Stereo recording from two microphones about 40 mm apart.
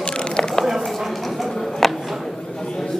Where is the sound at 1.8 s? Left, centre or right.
Centre.